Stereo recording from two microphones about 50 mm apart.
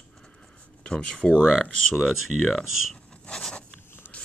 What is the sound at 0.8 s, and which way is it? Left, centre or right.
Speech, centre.